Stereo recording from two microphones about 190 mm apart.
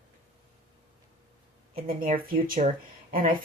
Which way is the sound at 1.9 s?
50° right (ahead or behind).